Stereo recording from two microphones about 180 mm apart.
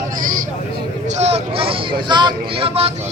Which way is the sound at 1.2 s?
35° right (ahead or behind).